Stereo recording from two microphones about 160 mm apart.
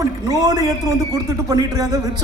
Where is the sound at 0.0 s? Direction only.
20° right (ahead or behind).